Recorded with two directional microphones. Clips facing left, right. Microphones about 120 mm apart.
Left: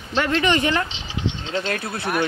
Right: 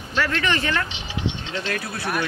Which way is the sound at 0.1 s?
25° left (ahead or behind).